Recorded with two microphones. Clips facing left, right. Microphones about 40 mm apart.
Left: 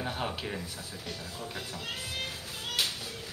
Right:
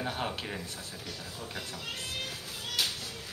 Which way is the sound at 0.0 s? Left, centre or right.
Centre.